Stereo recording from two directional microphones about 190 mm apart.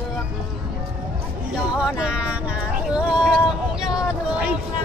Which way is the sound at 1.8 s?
5° right (ahead or behind).